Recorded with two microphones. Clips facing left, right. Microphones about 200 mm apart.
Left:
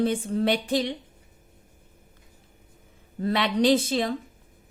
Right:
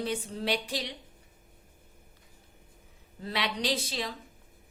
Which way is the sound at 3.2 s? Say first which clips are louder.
Left 10 dB; 50° left (ahead or behind).